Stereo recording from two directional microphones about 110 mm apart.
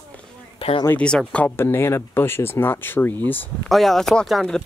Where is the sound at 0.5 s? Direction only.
55° left (ahead or behind).